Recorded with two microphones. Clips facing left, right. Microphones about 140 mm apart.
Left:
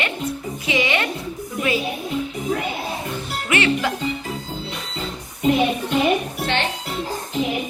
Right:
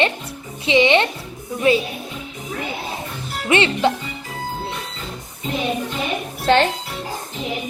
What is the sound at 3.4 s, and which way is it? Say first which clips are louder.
Speech: right 3 dB; 25° right (ahead or behind).